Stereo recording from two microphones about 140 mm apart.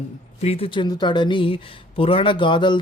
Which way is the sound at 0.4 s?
45° left (ahead or behind).